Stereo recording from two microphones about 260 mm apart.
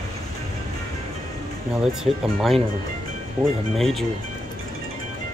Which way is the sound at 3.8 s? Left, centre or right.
Centre.